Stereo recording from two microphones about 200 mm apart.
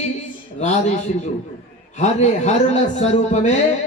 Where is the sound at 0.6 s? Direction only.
35° left (ahead or behind).